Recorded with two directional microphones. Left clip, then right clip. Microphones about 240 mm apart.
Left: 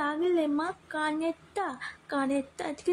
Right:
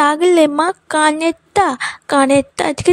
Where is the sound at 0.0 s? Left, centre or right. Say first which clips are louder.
Right 17 dB; right.